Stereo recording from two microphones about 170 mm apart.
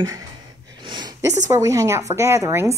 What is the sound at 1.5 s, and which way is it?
A woman's voice, 20° right (ahead or behind).